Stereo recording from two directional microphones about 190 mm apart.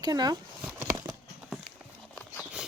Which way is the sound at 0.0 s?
20° right (ahead or behind).